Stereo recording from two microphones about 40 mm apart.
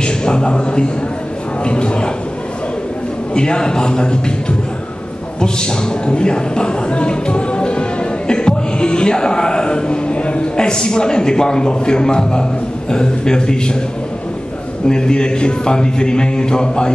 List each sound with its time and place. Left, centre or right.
0.0 s a man's voice: left
3.3 s a man's voice: left
14.9 s a man's voice: centre